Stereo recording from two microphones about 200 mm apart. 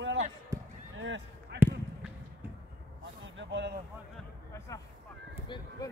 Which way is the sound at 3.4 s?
60° right (ahead or behind).